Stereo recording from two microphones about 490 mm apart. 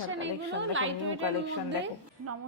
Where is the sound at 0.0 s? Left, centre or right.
Right.